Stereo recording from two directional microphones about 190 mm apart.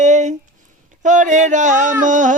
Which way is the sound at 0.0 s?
40° right (ahead or behind).